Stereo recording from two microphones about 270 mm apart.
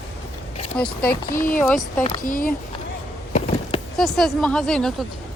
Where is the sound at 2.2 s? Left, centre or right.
Left.